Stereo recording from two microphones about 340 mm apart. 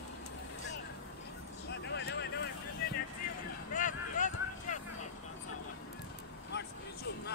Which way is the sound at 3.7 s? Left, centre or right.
Left.